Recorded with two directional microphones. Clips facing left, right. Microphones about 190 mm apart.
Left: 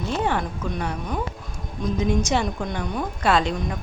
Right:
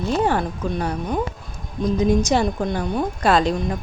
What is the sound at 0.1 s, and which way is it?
A woman's voice, 40° right (ahead or behind).